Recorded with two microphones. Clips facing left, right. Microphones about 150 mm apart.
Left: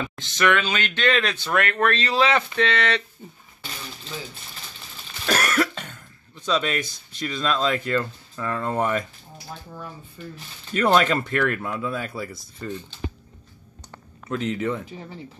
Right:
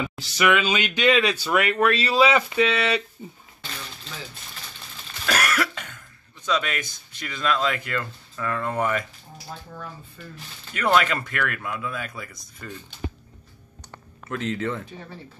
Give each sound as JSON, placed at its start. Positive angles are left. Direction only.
{"t": 0.0, "sound": "speech", "side_deg": -10}
{"t": 5.2, "sound": "cough", "side_deg": 30}
{"t": 6.4, "sound": "speech", "side_deg": 30}
{"t": 10.7, "sound": "speech", "side_deg": 30}
{"t": 14.3, "sound": "speech", "side_deg": 20}